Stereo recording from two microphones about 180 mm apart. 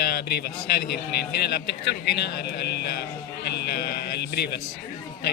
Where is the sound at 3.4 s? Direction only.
65° left (ahead or behind).